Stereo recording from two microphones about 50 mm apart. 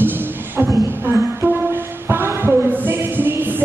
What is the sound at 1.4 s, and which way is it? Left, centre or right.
Music, right.